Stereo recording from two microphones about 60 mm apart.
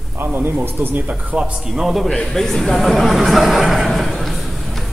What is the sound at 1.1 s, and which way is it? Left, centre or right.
Speech, centre.